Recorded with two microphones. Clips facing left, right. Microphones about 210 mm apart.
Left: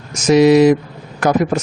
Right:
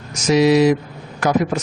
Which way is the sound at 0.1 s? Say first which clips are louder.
Left 4 dB; 50° left (ahead or behind).